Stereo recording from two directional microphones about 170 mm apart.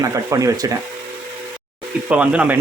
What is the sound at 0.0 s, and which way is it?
Stir, 20° right (ahead or behind).